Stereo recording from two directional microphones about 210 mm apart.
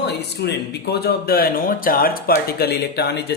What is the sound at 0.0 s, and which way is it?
Speech, 50° left (ahead or behind).